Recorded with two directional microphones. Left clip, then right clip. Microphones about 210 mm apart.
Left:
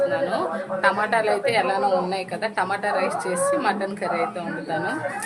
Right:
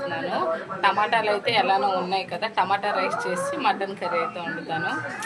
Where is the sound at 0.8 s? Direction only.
20° left (ahead or behind).